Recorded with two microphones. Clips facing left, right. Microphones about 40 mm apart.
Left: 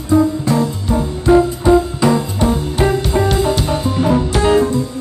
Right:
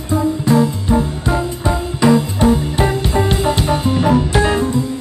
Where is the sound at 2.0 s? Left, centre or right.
Right.